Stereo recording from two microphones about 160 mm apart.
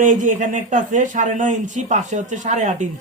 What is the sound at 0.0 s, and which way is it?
Speech, 50° right (ahead or behind).